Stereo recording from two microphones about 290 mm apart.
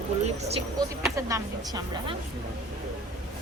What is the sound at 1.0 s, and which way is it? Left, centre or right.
A woman's voice, centre.